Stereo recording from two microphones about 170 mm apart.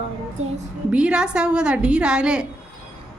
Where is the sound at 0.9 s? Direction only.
5° right (ahead or behind).